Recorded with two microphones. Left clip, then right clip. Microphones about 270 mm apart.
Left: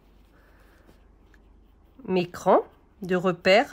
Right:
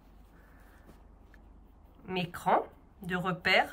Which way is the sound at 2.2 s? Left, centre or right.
Centre.